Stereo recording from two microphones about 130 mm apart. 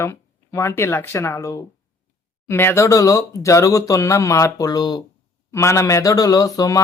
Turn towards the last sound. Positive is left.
turn(degrees=25)  # may be behind; listen again after turning